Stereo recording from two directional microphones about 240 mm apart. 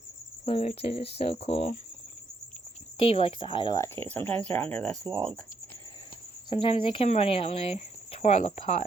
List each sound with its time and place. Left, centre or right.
0.4 s speech: left
3.0 s speech: left; by 4.9 s centre
6.5 s speech: left